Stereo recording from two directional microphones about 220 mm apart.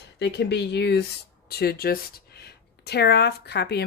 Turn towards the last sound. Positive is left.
turn(degrees=50)  # may be behind; listen again after turning